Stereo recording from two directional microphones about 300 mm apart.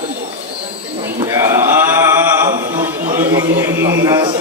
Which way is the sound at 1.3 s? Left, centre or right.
Centre.